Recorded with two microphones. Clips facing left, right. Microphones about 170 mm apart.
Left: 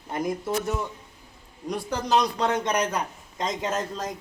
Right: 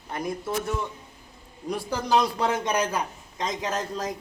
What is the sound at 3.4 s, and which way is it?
Speech, 25° left (ahead or behind).